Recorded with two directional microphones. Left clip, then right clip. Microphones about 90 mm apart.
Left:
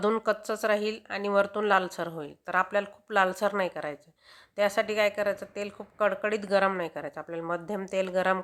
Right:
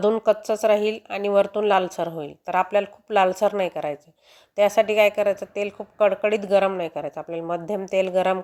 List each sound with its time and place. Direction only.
0.2 s a woman's voice: 20° right (ahead or behind)